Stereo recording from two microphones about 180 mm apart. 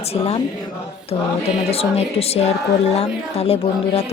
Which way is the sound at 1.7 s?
35° left (ahead or behind).